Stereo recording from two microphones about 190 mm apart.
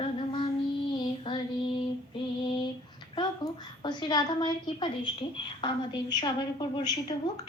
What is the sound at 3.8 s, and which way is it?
A woman's voice, 25° left (ahead or behind).